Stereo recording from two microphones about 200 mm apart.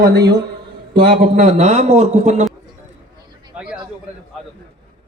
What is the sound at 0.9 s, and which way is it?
A man's voice, 45° right (ahead or behind).